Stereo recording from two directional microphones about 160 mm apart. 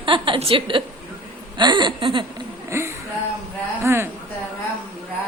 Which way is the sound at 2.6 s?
15° right (ahead or behind).